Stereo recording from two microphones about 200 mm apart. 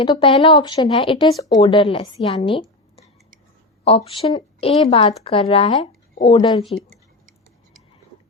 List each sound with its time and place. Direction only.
0.0 s a woman's voice: 25° left (ahead or behind)